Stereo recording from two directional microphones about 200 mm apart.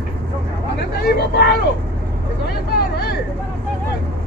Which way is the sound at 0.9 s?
55° left (ahead or behind).